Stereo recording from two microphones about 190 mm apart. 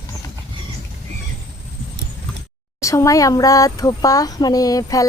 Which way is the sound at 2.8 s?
15° left (ahead or behind).